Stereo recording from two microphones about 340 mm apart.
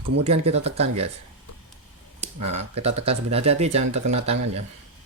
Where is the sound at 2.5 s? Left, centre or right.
Centre.